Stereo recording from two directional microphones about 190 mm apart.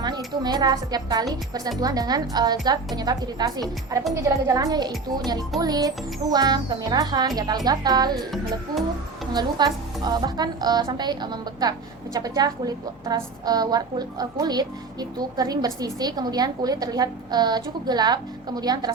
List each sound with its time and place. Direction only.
0.4 s a woman's voice: 20° right (ahead or behind)
9.3 s a woman's voice: 20° right (ahead or behind)